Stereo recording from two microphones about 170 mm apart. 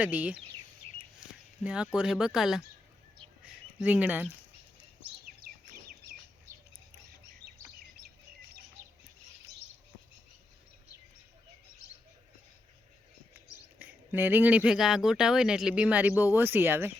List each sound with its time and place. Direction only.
0.0 s speech: 10° right (ahead or behind)
0.8 s a sound: 35° right (ahead or behind)
1.2 s speech: 5° right (ahead or behind)
3.4 s a sound: 5° right (ahead or behind)
5.4 s bird: 60° right (ahead or behind)
13.7 s speech: 10° right (ahead or behind)